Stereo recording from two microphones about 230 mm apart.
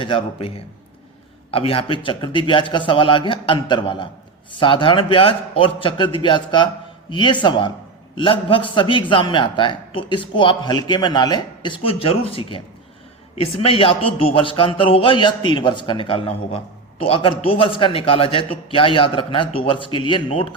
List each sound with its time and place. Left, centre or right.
0.0 s speech: left